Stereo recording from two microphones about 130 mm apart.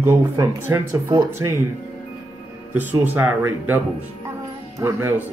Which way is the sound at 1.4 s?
30° right (ahead or behind).